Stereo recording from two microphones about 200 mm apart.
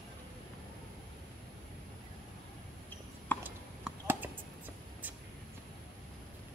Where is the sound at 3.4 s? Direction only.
10° right (ahead or behind).